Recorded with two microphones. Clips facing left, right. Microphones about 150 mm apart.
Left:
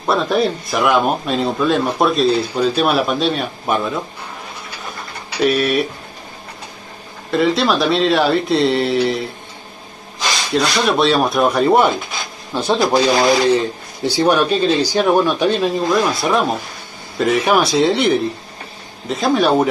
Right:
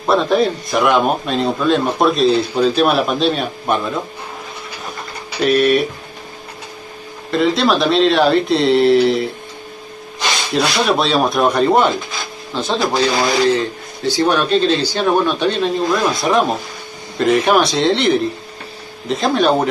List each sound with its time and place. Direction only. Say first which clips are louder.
0.0 s a man's voice: right 2 dB; centre (ahead or behind)
5.4 s a man's voice: right 2 dB; centre (ahead or behind)
7.2 s a man's voice: right 1 dB; centre (ahead or behind)
10.5 s a man's voice: even; centre (ahead or behind)
12.5 s speech: left 2 dB; 15° left (ahead or behind)
16.2 s a man's voice: right 1 dB; centre (ahead or behind)